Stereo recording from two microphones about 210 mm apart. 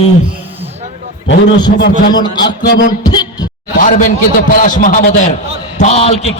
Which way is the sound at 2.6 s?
55° left (ahead or behind).